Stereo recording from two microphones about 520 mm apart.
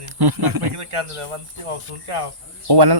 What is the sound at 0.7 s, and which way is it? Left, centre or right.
Speech, right.